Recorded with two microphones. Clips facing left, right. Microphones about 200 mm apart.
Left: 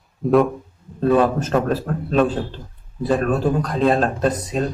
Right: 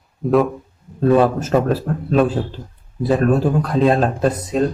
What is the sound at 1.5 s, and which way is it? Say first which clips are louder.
Speech: right 2 dB; 5° right (ahead or behind).